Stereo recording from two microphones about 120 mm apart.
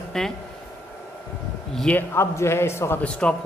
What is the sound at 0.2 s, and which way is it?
Speech, 5° left (ahead or behind).